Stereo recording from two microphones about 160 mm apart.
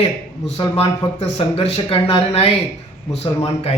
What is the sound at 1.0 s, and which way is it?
Speech, 35° left (ahead or behind).